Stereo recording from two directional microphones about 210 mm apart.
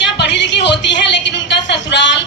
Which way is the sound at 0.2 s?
55° left (ahead or behind).